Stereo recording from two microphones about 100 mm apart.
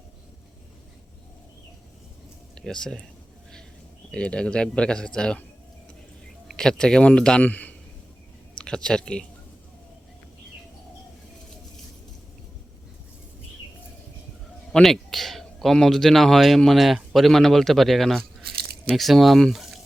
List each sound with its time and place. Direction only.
2.6 s speech: 5° left (ahead or behind)
4.1 s speech: 10° left (ahead or behind)
6.5 s speech: 5° left (ahead or behind)
14.7 s a man's voice: 5° left (ahead or behind)